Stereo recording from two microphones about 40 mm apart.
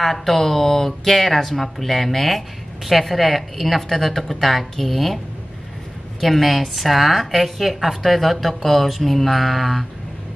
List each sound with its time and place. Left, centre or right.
0.0 s speech: centre
6.2 s speech: centre